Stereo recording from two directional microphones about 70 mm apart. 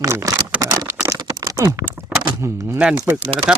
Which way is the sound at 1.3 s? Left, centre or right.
Right.